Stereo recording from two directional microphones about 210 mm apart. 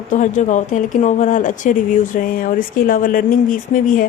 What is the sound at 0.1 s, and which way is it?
Speech, 35° left (ahead or behind).